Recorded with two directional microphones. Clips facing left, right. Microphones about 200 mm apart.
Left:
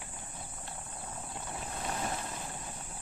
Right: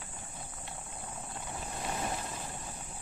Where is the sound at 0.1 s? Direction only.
Centre (ahead or behind).